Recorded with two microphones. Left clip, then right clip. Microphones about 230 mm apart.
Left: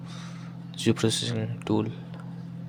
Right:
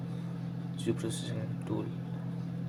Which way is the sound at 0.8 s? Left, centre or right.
Left.